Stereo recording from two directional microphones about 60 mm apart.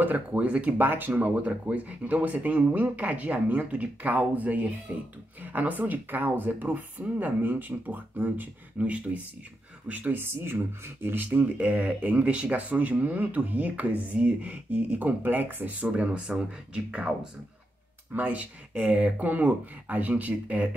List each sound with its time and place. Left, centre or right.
0.0 s speech: right
0.7 s speech: right
10.2 s speech: right
15.9 s speech: centre
18.1 s speech: right